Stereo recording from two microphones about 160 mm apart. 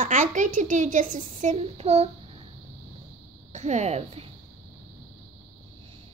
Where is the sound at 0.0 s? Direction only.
50° right (ahead or behind).